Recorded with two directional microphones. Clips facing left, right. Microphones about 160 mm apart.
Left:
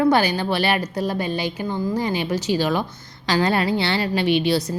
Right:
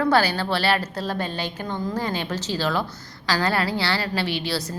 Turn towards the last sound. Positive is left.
turn(degrees=20)  # may be behind; listen again after turning